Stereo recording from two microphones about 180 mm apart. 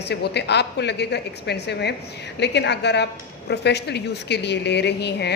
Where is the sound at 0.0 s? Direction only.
70° left (ahead or behind).